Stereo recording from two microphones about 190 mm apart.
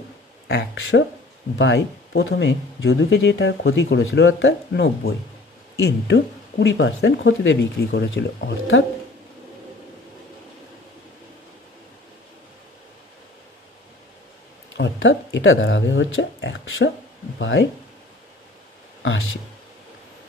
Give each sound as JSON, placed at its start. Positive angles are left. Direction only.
{"t": 0.5, "sound": "speech", "side_deg": 60}
{"t": 1.6, "sound": "speech", "side_deg": 75}
{"t": 14.7, "sound": "speech", "side_deg": 75}